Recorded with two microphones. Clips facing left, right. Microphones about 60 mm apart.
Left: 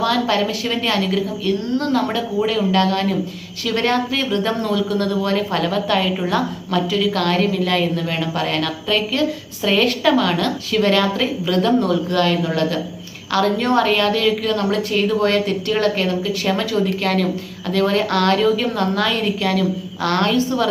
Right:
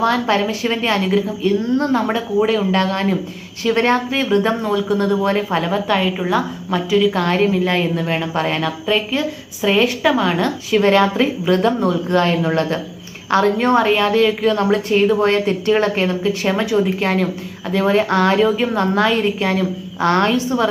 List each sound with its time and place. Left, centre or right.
0.0 s speech: right